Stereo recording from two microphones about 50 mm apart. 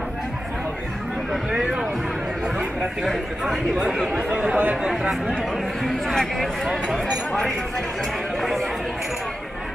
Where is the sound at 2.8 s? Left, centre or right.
Centre.